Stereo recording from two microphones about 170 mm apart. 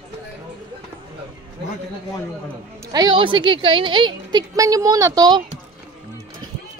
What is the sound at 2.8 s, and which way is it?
A woman's voice, 25° right (ahead or behind).